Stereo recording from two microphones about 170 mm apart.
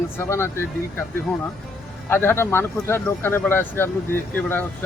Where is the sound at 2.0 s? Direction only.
15° left (ahead or behind).